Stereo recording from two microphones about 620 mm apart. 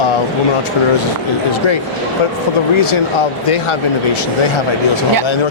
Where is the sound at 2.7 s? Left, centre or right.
Left.